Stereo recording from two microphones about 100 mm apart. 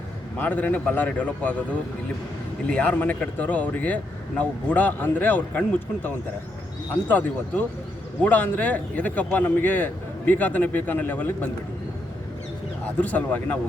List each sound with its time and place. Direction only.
0.3 s speech: 15° left (ahead or behind)
2.6 s speech: 15° left (ahead or behind)
7.1 s speech: 15° left (ahead or behind)
13.0 s speech: 15° left (ahead or behind)